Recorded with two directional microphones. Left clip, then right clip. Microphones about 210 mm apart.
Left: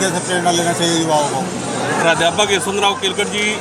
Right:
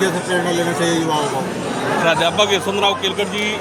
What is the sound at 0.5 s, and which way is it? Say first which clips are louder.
Speech: left 1 dB; 30° left (ahead or behind).